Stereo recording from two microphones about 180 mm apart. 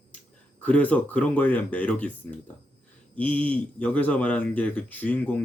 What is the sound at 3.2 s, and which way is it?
Speech, 10° left (ahead or behind).